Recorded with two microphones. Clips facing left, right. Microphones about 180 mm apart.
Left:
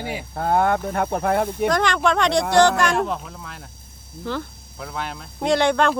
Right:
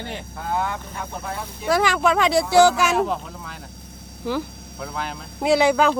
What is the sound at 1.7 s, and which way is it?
Speech, 5° right (ahead or behind).